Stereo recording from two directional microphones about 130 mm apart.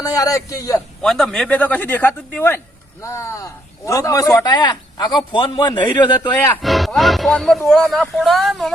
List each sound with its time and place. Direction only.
0.0 s a man's voice: 25° left (ahead or behind)
1.0 s a man's voice: 5° left (ahead or behind); by 6.3 s 35° left (ahead or behind)
6.6 s speech: centre (ahead or behind)